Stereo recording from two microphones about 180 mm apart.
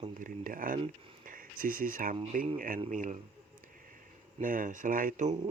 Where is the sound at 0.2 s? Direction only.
50° right (ahead or behind).